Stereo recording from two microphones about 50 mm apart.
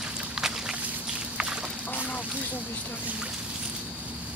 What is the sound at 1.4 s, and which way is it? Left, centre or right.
Duck, centre.